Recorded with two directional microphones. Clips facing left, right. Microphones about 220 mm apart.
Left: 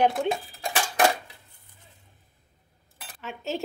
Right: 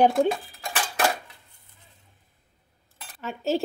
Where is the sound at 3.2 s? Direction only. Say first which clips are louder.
Right 6 dB; 35° right (ahead or behind).